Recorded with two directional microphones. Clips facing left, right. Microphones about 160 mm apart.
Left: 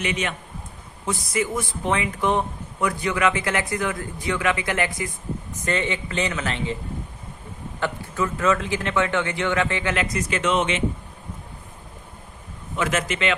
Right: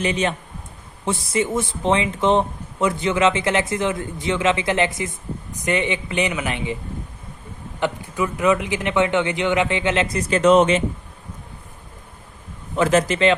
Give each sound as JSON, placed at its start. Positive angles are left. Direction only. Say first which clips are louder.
{"t": 0.0, "sound": "a man's voice", "louder": "right 5 dB", "side_deg": -30}
{"t": 7.8, "sound": "speech", "louder": "right 3 dB", "side_deg": -15}
{"t": 12.7, "sound": "a man's voice", "louder": "right 7 dB", "side_deg": -35}